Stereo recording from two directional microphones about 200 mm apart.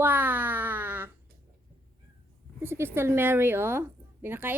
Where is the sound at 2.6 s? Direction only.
10° right (ahead or behind).